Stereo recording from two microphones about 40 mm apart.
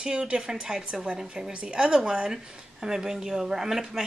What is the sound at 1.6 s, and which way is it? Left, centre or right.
A woman's voice, right.